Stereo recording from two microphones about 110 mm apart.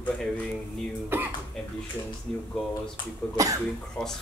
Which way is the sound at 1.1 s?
20° right (ahead or behind).